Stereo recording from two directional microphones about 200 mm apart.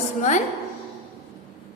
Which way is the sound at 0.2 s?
40° left (ahead or behind).